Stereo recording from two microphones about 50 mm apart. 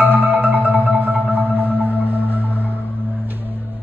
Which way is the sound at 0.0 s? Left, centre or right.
Right.